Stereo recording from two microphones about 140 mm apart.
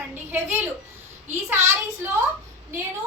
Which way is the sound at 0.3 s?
15° right (ahead or behind).